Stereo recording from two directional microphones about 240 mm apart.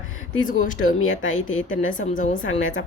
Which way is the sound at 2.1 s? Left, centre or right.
Left.